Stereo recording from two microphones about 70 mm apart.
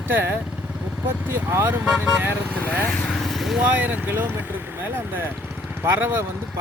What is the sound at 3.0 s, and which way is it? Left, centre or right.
Vehicle, centre.